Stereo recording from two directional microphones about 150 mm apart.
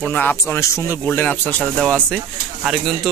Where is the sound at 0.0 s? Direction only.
10° left (ahead or behind).